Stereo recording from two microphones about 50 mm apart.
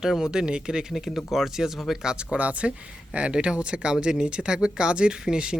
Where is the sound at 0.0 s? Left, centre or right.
Centre.